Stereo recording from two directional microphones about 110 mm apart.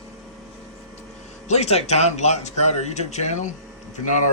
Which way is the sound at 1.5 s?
75° left (ahead or behind).